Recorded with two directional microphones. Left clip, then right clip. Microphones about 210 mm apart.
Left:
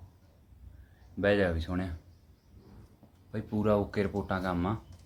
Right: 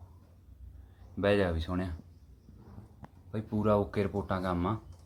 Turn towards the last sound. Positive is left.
turn(degrees=0)  # may be behind; listen again after turning